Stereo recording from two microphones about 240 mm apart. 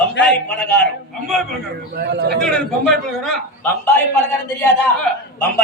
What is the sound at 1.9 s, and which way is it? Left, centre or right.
Speech, right.